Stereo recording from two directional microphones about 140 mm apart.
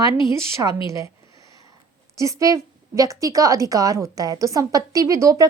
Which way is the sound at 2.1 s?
20° right (ahead or behind).